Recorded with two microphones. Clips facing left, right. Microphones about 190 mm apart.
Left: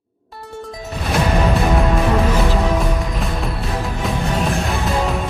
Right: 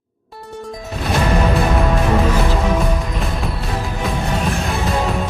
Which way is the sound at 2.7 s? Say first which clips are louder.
Right 1 dB; centre (ahead or behind).